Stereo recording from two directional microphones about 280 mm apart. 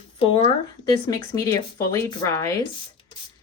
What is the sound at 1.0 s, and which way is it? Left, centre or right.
A woman's voice, centre.